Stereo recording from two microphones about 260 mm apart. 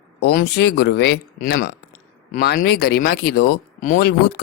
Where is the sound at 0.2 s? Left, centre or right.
Left.